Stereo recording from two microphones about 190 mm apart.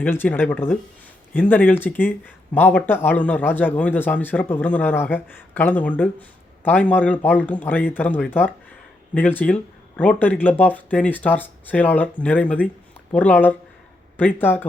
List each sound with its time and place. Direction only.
0.0 s a man's voice: 10° left (ahead or behind)